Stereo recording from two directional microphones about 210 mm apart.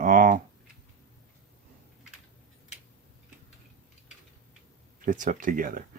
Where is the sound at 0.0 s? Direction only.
40° right (ahead or behind).